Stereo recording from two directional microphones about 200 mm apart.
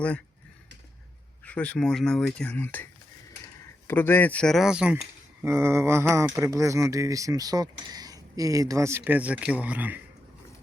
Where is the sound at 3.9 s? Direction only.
10° left (ahead or behind); by 10.0 s 10° right (ahead or behind).